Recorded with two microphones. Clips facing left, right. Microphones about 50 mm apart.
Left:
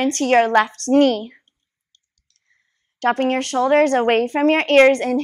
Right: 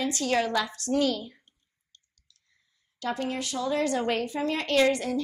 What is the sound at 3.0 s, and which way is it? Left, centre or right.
A woman's voice, left.